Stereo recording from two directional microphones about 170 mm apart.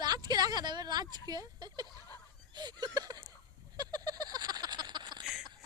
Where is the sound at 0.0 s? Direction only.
25° right (ahead or behind).